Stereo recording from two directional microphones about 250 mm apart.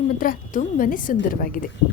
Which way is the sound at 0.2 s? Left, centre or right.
Left.